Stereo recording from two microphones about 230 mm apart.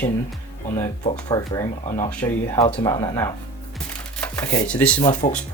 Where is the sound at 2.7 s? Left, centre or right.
Left.